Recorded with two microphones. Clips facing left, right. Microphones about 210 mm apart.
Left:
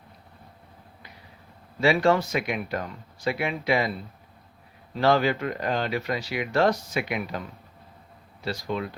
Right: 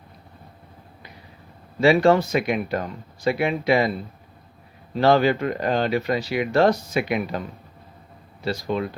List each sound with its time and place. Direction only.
1.8 s speech: 30° right (ahead or behind)
4.9 s speech: 30° right (ahead or behind)
8.4 s speech: 30° right (ahead or behind)